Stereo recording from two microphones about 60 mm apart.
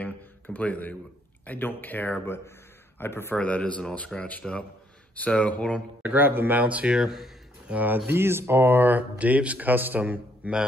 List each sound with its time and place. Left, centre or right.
0.0 s a sound: left
1.4 s speech: left
2.2 s a man's voice: left
3.3 s speech: left
6.0 s speech: right
6.6 s speech: right
7.0 s a sound: centre
7.7 s speech: right
8.1 s speech: right